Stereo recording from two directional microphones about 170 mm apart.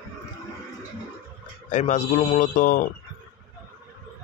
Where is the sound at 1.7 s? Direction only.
45° left (ahead or behind).